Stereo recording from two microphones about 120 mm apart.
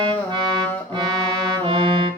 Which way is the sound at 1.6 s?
45° right (ahead or behind).